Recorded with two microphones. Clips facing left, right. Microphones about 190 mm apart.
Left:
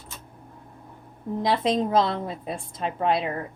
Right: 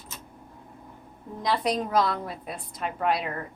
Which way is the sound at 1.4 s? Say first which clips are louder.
Left 3 dB; 25° left (ahead or behind).